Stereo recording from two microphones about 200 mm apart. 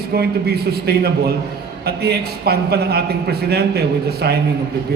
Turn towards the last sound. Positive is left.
turn(degrees=-50)  # may be behind; listen again after turning